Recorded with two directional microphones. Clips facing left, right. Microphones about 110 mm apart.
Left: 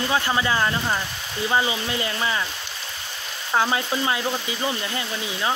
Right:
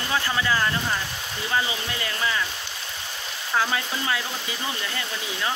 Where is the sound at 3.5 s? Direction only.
25° left (ahead or behind).